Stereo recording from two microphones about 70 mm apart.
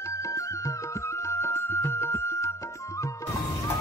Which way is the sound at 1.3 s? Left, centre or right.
Left.